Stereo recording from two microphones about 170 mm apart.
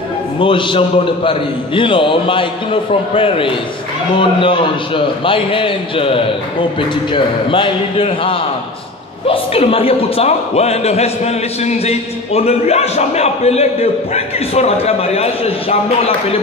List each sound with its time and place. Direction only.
0.4 s speech: 30° left (ahead or behind)